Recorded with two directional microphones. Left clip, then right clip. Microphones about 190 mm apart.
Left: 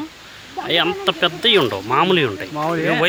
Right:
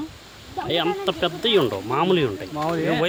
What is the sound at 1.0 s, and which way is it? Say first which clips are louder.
Speech: left 6 dB; 5° left (ahead or behind).